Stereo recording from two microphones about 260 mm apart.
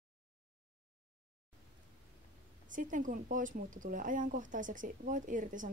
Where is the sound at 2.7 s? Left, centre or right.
Right.